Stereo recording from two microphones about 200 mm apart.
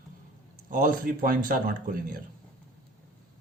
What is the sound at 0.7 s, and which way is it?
Speech, 40° right (ahead or behind).